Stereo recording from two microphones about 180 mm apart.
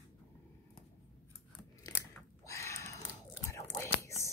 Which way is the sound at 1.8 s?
20° left (ahead or behind).